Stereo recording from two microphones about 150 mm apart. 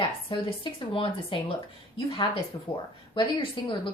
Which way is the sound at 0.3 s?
35° left (ahead or behind).